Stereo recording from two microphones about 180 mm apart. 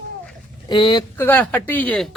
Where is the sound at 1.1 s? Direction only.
10° left (ahead or behind).